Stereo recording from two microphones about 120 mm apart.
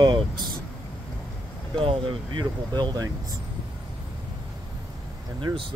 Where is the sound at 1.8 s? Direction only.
50° right (ahead or behind).